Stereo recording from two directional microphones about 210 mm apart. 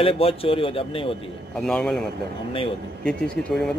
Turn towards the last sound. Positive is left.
turn(degrees=0)  # may be behind; listen again after turning